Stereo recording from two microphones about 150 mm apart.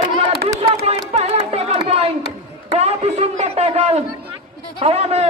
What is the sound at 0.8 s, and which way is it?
Music, 45° right (ahead or behind).